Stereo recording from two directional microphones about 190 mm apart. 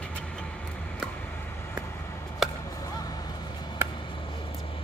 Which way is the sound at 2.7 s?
20° left (ahead or behind).